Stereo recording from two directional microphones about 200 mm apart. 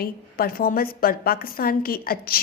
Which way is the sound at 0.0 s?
50° left (ahead or behind).